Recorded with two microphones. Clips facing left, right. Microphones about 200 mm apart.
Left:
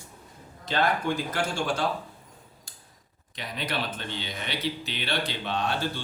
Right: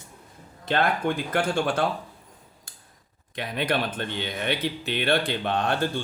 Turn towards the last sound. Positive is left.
turn(degrees=-50)  # may be behind; listen again after turning